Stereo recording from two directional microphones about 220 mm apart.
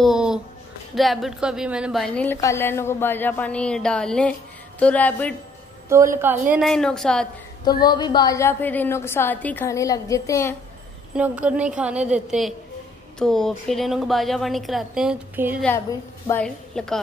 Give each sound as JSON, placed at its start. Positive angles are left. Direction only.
{"t": 0.0, "sound": "a woman's voice", "side_deg": 0}
{"t": 5.9, "sound": "a woman's voice", "side_deg": -10}
{"t": 6.5, "sound": "a woman's voice", "side_deg": 0}
{"t": 7.6, "sound": "a woman's voice", "side_deg": 20}
{"t": 11.1, "sound": "a woman's voice", "side_deg": -5}
{"t": 16.3, "sound": "a woman's voice", "side_deg": 5}